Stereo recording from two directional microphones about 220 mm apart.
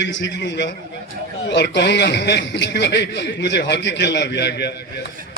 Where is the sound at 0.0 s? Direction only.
55° left (ahead or behind).